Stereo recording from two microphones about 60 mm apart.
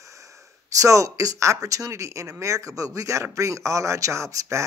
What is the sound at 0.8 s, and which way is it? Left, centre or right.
Speech, right.